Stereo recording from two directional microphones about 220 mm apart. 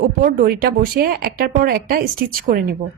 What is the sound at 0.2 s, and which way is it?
A woman's voice, 40° right (ahead or behind).